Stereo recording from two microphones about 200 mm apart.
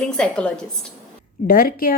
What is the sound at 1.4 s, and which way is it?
Speech, 45° left (ahead or behind).